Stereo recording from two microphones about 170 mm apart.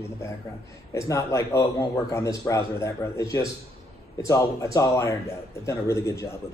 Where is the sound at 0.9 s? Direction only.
20° left (ahead or behind).